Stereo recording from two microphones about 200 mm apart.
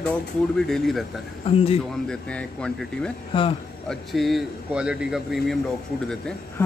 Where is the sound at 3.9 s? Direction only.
Centre (ahead or behind).